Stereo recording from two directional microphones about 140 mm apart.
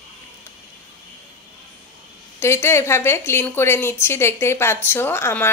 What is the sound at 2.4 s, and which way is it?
Speech, 20° left (ahead or behind).